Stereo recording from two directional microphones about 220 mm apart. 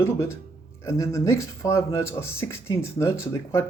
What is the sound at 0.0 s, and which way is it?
Speech, 10° left (ahead or behind).